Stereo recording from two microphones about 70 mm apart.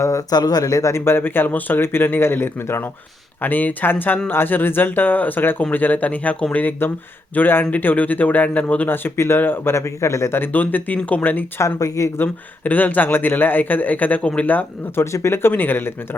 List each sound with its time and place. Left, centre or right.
0.0 s speech: left
0.3 s speech: left
3.4 s a man's voice: left
11.6 s speech: left
12.1 s a man's voice: left
15.1 s speech: left